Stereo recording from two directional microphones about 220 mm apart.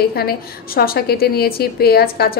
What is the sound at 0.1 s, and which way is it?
A woman's voice, 45° left (ahead or behind).